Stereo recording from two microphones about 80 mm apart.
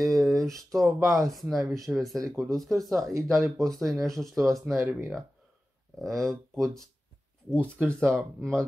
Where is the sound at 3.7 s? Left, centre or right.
Centre.